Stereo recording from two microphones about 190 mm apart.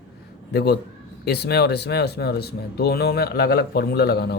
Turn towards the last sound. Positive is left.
turn(degrees=60)  # may be behind; listen again after turning